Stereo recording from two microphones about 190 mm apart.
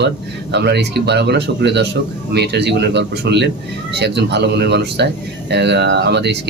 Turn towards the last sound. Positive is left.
turn(degrees=-60)  # may be behind; listen again after turning